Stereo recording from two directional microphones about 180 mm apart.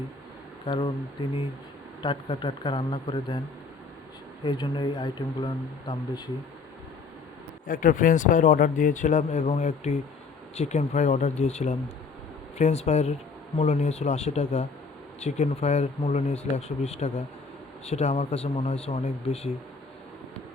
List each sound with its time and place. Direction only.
0.6 s speech: 30° left (ahead or behind)
2.0 s speech: 25° left (ahead or behind)
4.4 s speech: 25° left (ahead or behind)
7.7 s speech: 50° left (ahead or behind)